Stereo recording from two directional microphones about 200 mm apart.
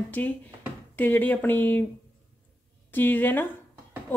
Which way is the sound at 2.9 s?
10° left (ahead or behind).